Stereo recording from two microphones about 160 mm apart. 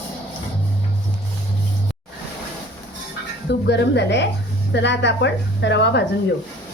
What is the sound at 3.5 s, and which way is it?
A woman's voice, 90° left.